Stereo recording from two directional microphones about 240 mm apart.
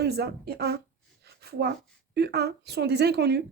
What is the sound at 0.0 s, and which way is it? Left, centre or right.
A woman's voice, right.